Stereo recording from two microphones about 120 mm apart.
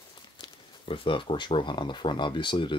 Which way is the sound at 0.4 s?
45° left (ahead or behind).